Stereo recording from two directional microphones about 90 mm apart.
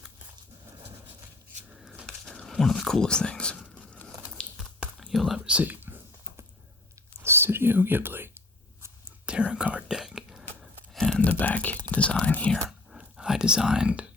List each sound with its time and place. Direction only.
1.7 s a sound: centre (ahead or behind)
2.0 s speech: 5° left (ahead or behind)
3.8 s biting: 15° left (ahead or behind)
4.5 s typing: 5° right (ahead or behind)
5.5 s speech: 15° right (ahead or behind)
7.2 s whispering: 25° right (ahead or behind)
9.2 s whispering: 10° right (ahead or behind)
10.9 s a sound: 5° left (ahead or behind)
11.3 s whispering: 15° left (ahead or behind)
12.6 s computer keyboard: 10° right (ahead or behind)